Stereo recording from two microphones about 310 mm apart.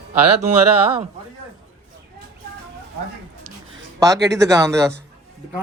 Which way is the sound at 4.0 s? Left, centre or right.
Centre.